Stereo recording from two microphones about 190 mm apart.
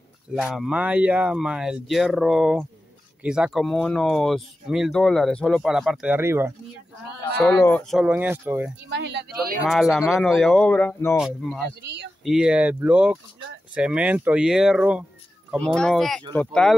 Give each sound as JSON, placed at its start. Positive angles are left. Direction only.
{"t": 0.3, "sound": "speech", "side_deg": 0}
{"t": 7.3, "sound": "speech", "side_deg": 10}
{"t": 8.1, "sound": "speech", "side_deg": -10}
{"t": 8.8, "sound": "speech", "side_deg": -65}
{"t": 9.7, "sound": "speech", "side_deg": 0}
{"t": 11.1, "sound": "speech", "side_deg": 0}
{"t": 11.8, "sound": "speech", "side_deg": -65}
{"t": 12.3, "sound": "speech", "side_deg": -5}